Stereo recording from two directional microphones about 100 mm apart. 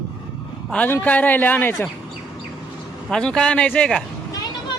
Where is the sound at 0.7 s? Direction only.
15° left (ahead or behind).